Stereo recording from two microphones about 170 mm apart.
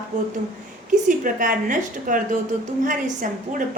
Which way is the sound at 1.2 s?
55° right (ahead or behind).